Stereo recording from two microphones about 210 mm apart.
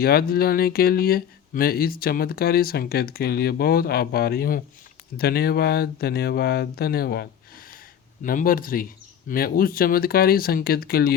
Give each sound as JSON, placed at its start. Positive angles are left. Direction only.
{"t": 0.0, "sound": "speech", "side_deg": 45}